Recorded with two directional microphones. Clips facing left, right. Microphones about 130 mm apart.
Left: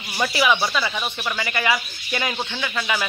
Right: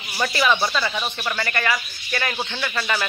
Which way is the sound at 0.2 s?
10° left (ahead or behind).